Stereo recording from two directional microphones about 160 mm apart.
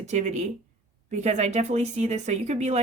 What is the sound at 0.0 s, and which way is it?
Speech, 45° right (ahead or behind).